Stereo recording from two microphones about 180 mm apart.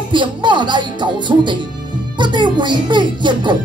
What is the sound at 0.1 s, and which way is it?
Speech, 25° right (ahead or behind).